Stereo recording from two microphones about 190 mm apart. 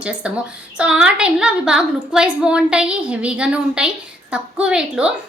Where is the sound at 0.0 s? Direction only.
5° right (ahead or behind).